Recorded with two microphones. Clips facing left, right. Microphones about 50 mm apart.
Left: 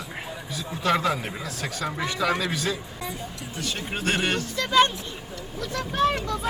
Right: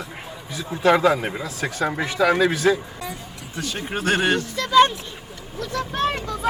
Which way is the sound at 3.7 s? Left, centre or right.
Right.